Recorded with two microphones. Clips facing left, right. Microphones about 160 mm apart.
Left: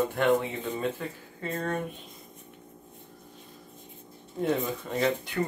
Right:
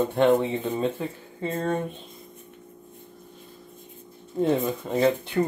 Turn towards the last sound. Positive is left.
turn(degrees=-25)  # may be behind; listen again after turning